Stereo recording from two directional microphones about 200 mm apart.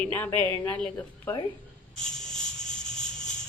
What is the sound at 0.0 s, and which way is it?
A woman's voice, 10° left (ahead or behind).